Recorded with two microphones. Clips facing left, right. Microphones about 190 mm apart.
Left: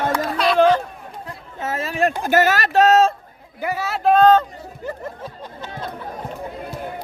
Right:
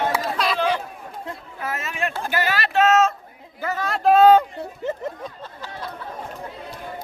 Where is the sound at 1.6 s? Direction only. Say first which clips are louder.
Left 7 dB; 30° left (ahead or behind).